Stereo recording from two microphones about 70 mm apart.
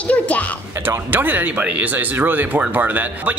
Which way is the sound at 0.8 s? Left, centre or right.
Right.